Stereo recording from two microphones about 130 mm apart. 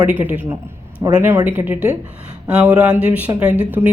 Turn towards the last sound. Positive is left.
turn(degrees=-15)  # may be behind; listen again after turning